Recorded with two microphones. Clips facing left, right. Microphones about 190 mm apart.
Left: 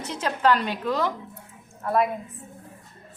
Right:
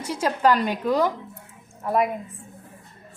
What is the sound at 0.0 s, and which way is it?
A woman's voice, 10° right (ahead or behind).